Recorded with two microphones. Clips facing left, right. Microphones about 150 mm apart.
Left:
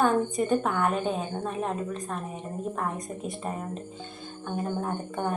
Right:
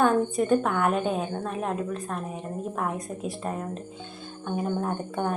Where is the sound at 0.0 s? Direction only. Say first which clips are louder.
Right 2 dB; centre (ahead or behind).